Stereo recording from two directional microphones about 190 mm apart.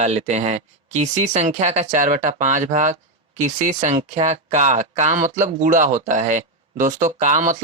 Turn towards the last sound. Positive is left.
turn(degrees=-40)  # may be behind; listen again after turning